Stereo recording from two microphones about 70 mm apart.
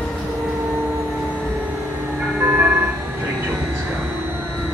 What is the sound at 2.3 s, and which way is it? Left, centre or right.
Vehicle, right.